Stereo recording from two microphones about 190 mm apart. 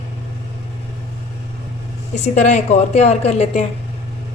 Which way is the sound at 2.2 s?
35° left (ahead or behind).